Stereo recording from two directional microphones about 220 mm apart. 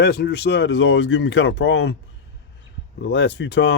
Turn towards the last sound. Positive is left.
turn(degrees=55)  # may be behind; listen again after turning